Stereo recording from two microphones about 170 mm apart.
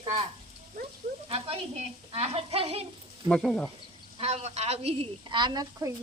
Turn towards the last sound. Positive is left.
turn(degrees=-25)  # may be behind; listen again after turning